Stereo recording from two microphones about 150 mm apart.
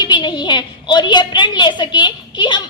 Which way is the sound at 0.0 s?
30° left (ahead or behind).